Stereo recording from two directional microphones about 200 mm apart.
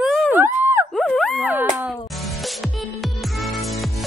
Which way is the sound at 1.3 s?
10° right (ahead or behind).